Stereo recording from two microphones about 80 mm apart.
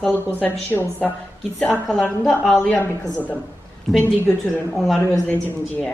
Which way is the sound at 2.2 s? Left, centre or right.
Centre.